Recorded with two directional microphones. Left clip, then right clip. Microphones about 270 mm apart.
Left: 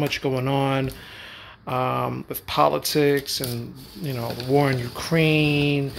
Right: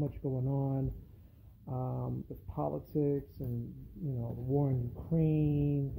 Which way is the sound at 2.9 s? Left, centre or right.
Left.